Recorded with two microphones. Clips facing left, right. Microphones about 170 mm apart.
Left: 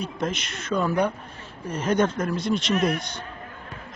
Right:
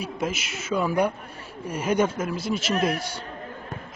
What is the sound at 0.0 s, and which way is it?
A man's voice, 5° right (ahead or behind).